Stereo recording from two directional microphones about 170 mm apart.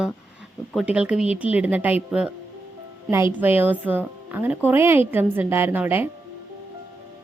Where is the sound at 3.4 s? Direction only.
10° right (ahead or behind).